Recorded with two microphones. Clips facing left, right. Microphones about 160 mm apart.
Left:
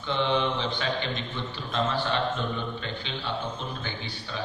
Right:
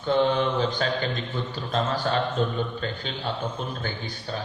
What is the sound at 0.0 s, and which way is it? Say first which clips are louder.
A man's voice: right 4 dB; 45° right (ahead or behind).